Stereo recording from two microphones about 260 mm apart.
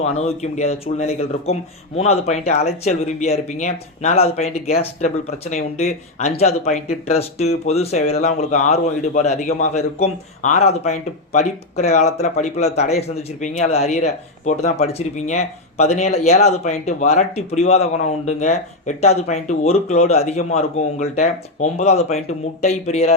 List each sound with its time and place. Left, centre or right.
0.0 s speech: left